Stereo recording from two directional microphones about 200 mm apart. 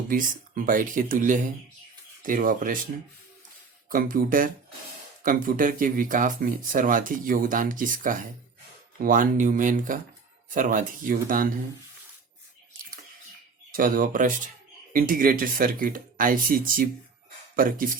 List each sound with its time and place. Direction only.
0.1 s speech: 45° right (ahead or behind)
3.9 s speech: 45° right (ahead or behind)
13.7 s speech: 45° right (ahead or behind)